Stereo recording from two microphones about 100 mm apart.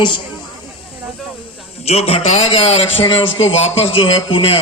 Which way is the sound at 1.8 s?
90° left.